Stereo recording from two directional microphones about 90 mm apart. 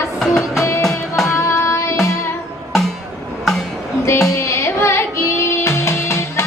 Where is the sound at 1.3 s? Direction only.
30° left (ahead or behind).